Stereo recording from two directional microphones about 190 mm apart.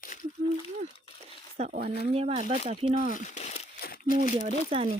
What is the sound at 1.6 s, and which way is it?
Speech, 35° right (ahead or behind).